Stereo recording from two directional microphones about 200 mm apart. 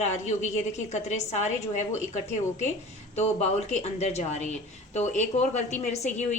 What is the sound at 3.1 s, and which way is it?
A woman's voice, 35° left (ahead or behind).